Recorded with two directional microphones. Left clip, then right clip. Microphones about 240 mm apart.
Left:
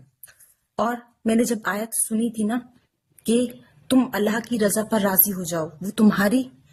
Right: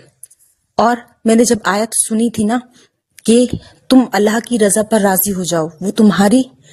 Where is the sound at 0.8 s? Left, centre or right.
Right.